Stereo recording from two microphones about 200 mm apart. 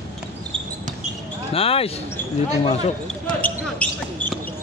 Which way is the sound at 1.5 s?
30° left (ahead or behind).